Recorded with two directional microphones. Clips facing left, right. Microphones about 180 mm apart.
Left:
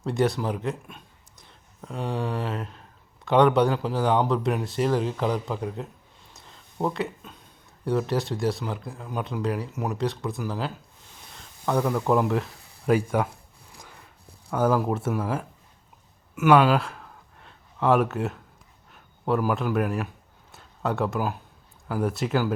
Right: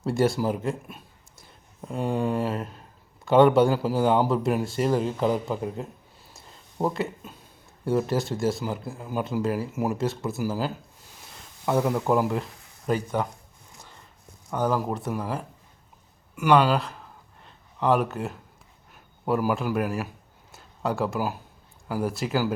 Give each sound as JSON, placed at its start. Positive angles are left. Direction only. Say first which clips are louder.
{"t": 0.0, "sound": "a man's voice", "louder": "right 1 dB", "side_deg": 0}
{"t": 12.9, "sound": "a man's voice", "louder": "left 3 dB", "side_deg": 10}
{"t": 14.5, "sound": "speech", "louder": "left 3 dB", "side_deg": 5}
{"t": 16.3, "sound": "a sound", "louder": "left 2 dB", "side_deg": 0}
{"t": 19.2, "sound": "speech", "louder": "even", "side_deg": -5}
{"t": 20.5, "sound": "a sound", "louder": "even", "side_deg": 0}
{"t": 21.8, "sound": "speech", "louder": "left 1 dB", "side_deg": 0}